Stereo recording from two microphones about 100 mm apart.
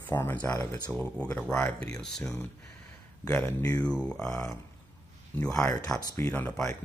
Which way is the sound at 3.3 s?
20° left (ahead or behind).